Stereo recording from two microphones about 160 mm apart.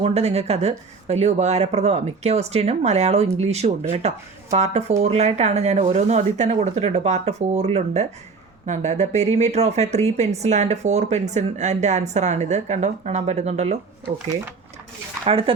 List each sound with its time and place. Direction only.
0.0 s speech: 40° right (ahead or behind)
15.2 s speech: 35° right (ahead or behind)